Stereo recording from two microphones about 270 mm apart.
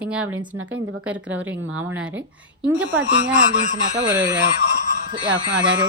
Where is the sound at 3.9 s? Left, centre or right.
Centre.